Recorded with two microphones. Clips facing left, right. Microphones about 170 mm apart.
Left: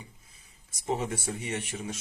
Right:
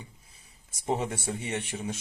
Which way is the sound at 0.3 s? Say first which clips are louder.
Right 1 dB; 30° right (ahead or behind).